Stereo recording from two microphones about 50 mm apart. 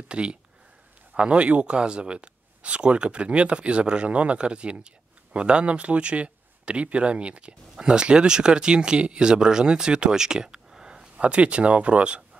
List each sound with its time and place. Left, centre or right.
0.1 s speech: right